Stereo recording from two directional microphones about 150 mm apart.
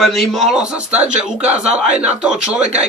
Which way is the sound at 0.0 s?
Centre (ahead or behind).